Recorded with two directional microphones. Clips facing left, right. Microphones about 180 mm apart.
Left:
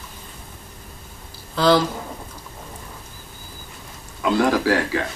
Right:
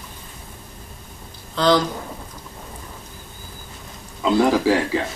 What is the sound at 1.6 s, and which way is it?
Speech, 5° left (ahead or behind).